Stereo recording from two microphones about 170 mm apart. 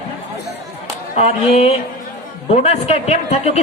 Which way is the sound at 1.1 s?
40° left (ahead or behind).